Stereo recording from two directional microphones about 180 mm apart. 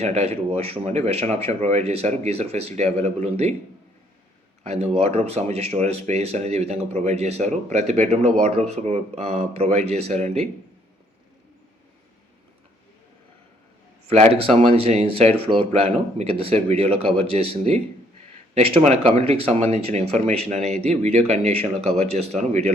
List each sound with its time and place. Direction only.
0.0 s speech: 35° right (ahead or behind)
4.6 s speech: 35° right (ahead or behind)
14.1 s speech: 35° right (ahead or behind)